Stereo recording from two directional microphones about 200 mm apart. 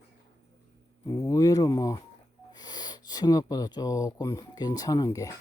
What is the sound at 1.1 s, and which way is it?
Speech, 15° left (ahead or behind).